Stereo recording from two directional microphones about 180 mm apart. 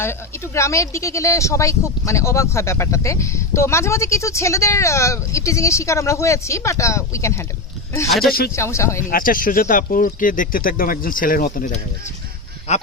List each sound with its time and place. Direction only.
0.0 s speech: 15° left (ahead or behind)
8.3 s speech: 55° left (ahead or behind)
8.5 s speech: 15° left (ahead or behind)
9.0 s speech: 50° left (ahead or behind)